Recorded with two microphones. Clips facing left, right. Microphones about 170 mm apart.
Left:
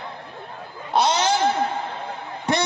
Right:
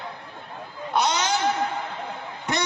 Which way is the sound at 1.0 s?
30° left (ahead or behind).